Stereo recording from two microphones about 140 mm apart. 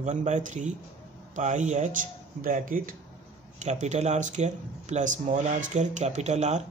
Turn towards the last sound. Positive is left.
turn(degrees=-55)  # may be behind; listen again after turning